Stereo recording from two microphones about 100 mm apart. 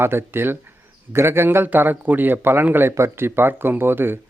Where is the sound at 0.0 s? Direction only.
20° right (ahead or behind).